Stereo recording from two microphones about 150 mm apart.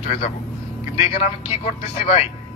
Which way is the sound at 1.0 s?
45° left (ahead or behind).